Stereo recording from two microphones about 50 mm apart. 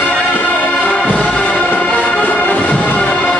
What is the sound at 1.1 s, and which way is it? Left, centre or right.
Music, left.